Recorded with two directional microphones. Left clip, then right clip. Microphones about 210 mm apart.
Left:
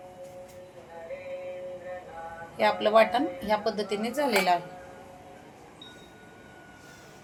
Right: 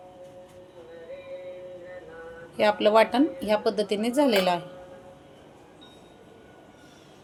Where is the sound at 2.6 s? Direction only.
40° right (ahead or behind).